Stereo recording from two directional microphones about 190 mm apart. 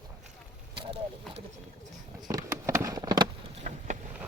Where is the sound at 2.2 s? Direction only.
20° right (ahead or behind).